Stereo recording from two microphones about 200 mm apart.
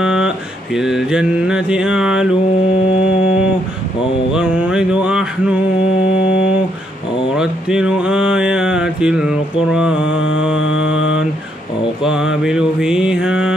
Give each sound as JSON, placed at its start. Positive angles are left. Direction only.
{"t": 0.0, "sound": "a sound", "side_deg": -5}
{"t": 0.7, "sound": "mantra", "side_deg": 0}
{"t": 4.3, "sound": "music", "side_deg": -5}
{"t": 7.3, "sound": "a sound", "side_deg": -5}
{"t": 10.9, "sound": "mantra", "side_deg": 75}
{"t": 12.0, "sound": "mantra", "side_deg": -5}